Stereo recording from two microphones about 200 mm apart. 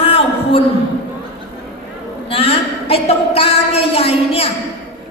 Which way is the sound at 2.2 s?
30° left (ahead or behind).